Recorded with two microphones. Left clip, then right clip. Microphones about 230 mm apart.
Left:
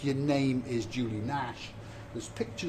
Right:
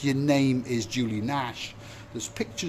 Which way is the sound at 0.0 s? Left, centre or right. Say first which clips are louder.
Right 5 dB; right.